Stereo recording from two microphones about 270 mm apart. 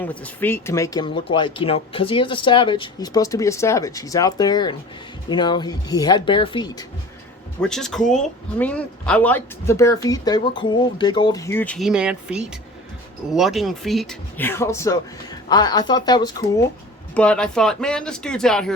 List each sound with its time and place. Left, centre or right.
0.0 s speech: centre
7.6 s speech: centre
17.2 s speech: centre